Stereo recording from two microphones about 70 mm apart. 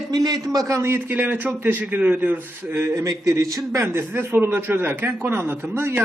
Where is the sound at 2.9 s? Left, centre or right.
Right.